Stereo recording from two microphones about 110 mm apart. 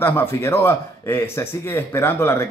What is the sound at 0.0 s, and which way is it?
Speech, 20° left (ahead or behind).